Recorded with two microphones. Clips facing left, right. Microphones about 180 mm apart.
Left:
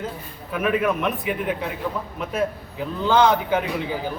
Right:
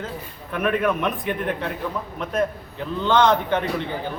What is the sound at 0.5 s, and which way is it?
A man's voice, 5° left (ahead or behind).